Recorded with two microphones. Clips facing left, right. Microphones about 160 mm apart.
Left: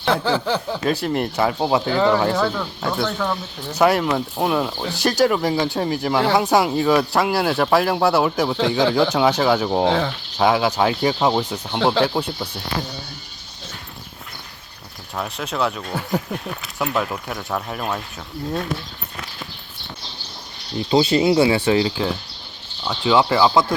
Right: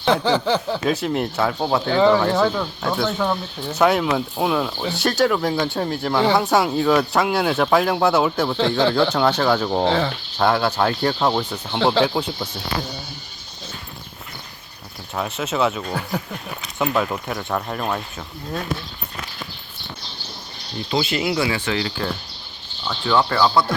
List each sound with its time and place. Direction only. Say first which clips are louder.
0.0 s a sound: right 2 dB; 5° left (ahead or behind)
1.0 s speech: left 1 dB; centre (ahead or behind)
11.4 s speech: left 1 dB; 20° left (ahead or behind)
11.8 s speech: even; centre (ahead or behind)
15.1 s speech: right 2 dB; centre (ahead or behind)
20.9 s speech: left 6 dB; 35° left (ahead or behind)
22.8 s a sound: left 2 dB; 15° left (ahead or behind)